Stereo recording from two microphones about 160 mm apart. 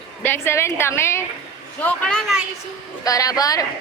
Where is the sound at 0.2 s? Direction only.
15° left (ahead or behind).